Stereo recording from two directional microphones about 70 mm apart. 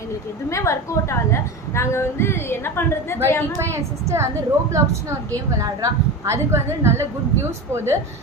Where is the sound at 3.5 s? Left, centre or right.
Right.